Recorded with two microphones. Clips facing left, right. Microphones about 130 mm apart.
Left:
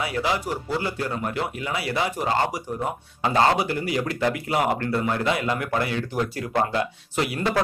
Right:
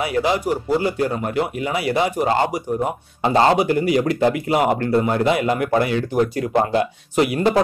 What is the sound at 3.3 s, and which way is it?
Speech, 30° right (ahead or behind).